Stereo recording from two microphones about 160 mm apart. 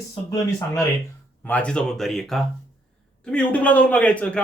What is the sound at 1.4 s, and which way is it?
A man's voice, 10° left (ahead or behind).